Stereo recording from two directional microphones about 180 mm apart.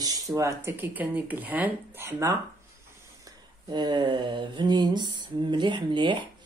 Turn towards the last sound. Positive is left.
turn(degrees=-25)  # may be behind; listen again after turning